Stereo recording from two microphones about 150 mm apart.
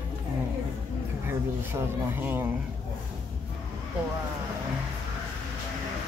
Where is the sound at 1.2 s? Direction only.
15° right (ahead or behind).